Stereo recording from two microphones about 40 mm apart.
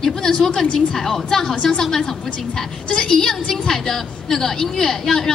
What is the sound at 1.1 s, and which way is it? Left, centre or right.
Speech, centre.